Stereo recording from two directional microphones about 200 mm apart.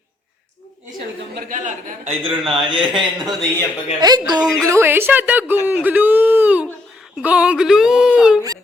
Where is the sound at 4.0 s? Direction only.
20° right (ahead or behind); by 8.4 s 5° right (ahead or behind).